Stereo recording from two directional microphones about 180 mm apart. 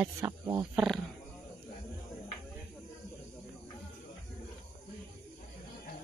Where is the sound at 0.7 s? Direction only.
Centre (ahead or behind).